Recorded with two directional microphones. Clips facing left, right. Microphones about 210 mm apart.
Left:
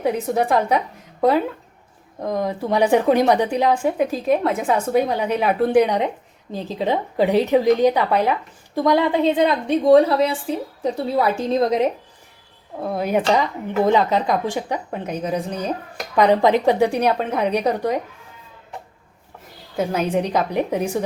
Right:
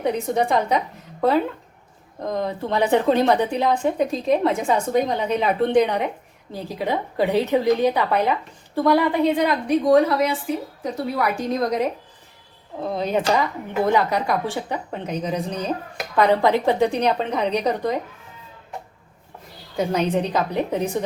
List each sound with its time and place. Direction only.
0.0 s a woman's voice: 5° left (ahead or behind)
2.2 s a woman's voice: 10° left (ahead or behind)
12.8 s a woman's voice: 5° left (ahead or behind)
19.7 s a woman's voice: 5° left (ahead or behind)